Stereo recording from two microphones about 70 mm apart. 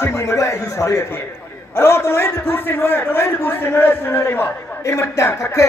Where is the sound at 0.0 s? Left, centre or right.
Left.